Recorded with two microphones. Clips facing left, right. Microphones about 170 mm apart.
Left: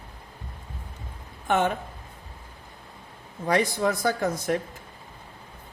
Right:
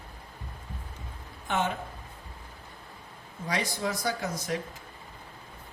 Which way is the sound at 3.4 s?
55° left (ahead or behind).